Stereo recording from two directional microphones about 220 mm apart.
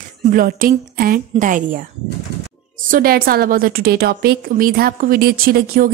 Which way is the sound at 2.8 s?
40° right (ahead or behind).